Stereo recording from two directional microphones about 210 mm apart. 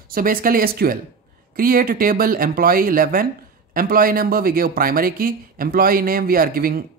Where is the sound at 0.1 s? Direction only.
45° right (ahead or behind).